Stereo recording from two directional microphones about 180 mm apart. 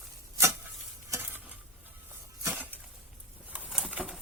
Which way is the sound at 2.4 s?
10° right (ahead or behind).